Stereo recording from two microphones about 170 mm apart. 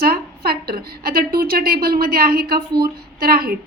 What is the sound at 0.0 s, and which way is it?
A woman's voice, 65° right (ahead or behind).